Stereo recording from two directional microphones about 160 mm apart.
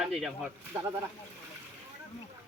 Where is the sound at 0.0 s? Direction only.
Centre (ahead or behind).